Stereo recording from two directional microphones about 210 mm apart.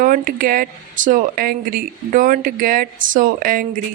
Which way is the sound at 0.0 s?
40° right (ahead or behind).